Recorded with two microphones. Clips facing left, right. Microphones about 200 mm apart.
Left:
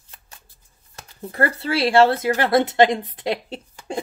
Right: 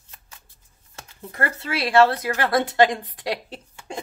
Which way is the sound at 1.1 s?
35° left (ahead or behind).